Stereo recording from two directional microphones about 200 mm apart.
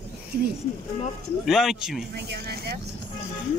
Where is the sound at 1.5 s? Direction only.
Centre (ahead or behind).